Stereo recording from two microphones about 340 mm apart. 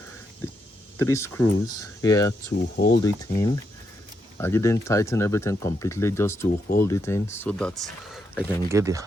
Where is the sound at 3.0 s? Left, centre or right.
Centre.